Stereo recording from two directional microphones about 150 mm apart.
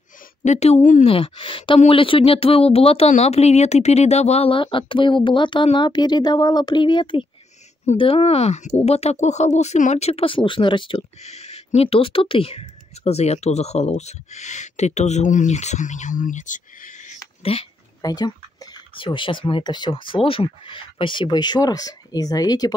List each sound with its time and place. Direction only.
0.4 s speech: 50° left (ahead or behind)
1.0 s speech: 35° left (ahead or behind)
11.2 s speech: 45° left (ahead or behind)
17.4 s speech: 40° left (ahead or behind)
18.0 s speech: 25° left (ahead or behind)